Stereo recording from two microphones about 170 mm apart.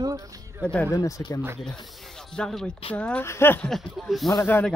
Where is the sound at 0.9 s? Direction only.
20° left (ahead or behind).